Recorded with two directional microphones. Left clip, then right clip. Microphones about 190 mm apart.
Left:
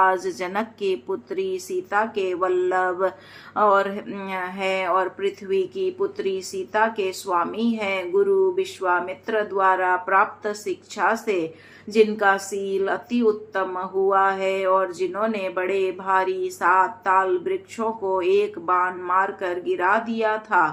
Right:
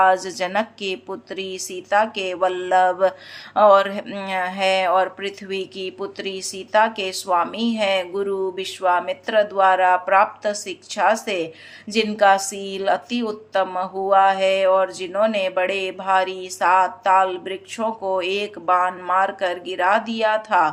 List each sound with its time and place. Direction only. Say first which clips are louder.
0.0 s speech: right 3 dB; 20° right (ahead or behind)
11.9 s a woman's voice: left 4 dB; 45° right (ahead or behind)
12.2 s speech: right 4 dB; 25° right (ahead or behind)